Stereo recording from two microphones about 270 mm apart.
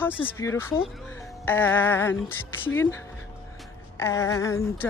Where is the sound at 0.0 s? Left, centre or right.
Centre.